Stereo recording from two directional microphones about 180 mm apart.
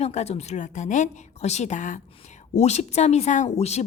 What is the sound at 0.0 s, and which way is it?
A woman's voice, 35° left (ahead or behind).